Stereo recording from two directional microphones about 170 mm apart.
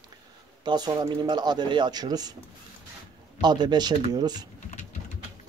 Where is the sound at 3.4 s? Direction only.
25° right (ahead or behind).